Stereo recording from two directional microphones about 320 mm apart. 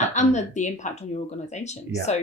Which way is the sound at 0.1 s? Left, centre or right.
Left.